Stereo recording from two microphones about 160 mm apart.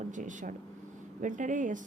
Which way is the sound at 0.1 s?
55° right (ahead or behind).